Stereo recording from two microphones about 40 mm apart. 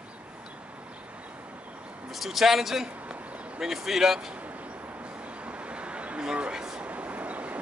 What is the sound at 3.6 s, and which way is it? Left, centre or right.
Speech, centre.